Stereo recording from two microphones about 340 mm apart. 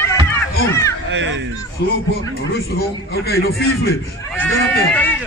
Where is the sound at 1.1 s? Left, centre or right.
Right.